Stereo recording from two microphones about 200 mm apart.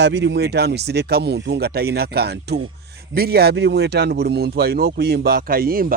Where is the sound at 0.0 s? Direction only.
60° right (ahead or behind).